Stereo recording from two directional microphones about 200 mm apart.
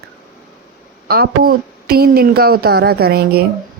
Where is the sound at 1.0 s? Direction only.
50° right (ahead or behind).